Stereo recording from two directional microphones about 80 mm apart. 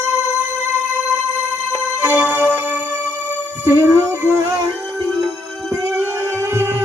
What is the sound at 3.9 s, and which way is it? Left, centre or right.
Music, right.